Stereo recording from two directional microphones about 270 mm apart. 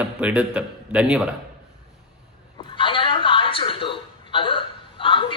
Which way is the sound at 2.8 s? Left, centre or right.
Centre.